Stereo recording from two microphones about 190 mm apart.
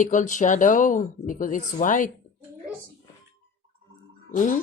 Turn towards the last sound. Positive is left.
turn(degrees=40)  # may be behind; listen again after turning